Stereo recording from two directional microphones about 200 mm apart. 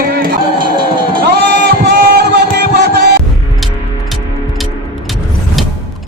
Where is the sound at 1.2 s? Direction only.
50° right (ahead or behind).